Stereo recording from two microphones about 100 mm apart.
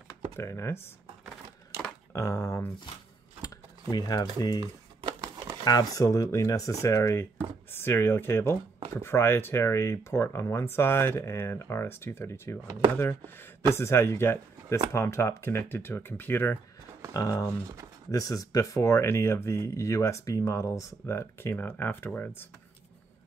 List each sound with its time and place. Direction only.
0.4 s speech: 30° left (ahead or behind)
2.1 s speech: 25° left (ahead or behind)
3.4 s speech: 40° left (ahead or behind)
5.6 s speech: 40° left (ahead or behind); by 16.5 s 20° left (ahead or behind)
17.1 s speech: 35° left (ahead or behind)